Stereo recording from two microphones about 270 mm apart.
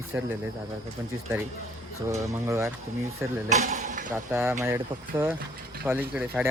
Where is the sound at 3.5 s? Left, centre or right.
Right.